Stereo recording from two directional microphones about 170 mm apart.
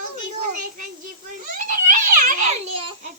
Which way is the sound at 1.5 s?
55° right (ahead or behind).